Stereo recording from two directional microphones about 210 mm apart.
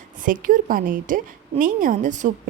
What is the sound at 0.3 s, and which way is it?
A woman's voice, 40° right (ahead or behind).